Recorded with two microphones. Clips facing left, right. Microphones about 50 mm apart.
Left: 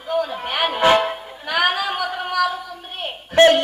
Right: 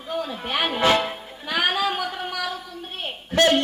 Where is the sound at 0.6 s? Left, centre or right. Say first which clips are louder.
Left 5 dB; centre.